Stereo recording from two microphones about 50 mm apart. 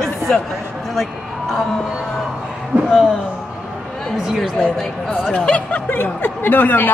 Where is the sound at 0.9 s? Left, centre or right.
Centre.